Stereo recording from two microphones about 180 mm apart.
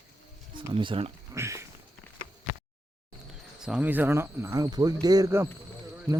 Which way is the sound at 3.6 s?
5° right (ahead or behind).